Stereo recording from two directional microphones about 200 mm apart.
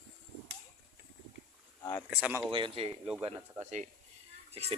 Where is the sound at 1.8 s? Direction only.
20° left (ahead or behind).